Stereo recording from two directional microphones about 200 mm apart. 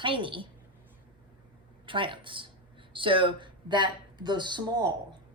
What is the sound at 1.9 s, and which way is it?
Speech, 25° right (ahead or behind).